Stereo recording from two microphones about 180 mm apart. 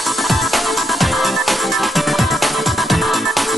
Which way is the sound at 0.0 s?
Centre (ahead or behind).